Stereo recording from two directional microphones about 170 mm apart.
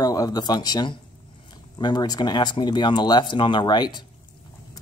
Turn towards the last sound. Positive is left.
turn(degrees=25)  # may be behind; listen again after turning